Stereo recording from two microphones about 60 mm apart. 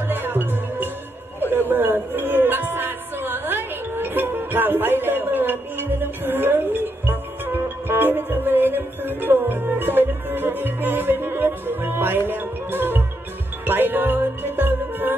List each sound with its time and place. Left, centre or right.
0.1 s music: right